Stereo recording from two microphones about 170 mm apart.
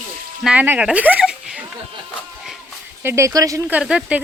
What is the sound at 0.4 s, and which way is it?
Speech, 10° right (ahead or behind).